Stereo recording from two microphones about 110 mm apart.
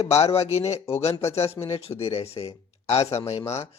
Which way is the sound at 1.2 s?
25° left (ahead or behind).